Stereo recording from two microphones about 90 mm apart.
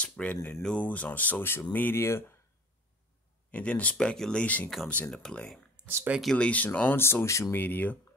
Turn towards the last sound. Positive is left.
turn(degrees=20)  # may be behind; listen again after turning